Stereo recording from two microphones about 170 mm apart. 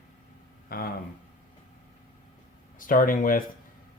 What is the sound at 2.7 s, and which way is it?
Speech, 55° left (ahead or behind).